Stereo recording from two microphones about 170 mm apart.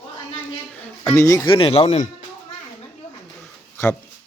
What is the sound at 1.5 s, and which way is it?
Speech, 35° left (ahead or behind).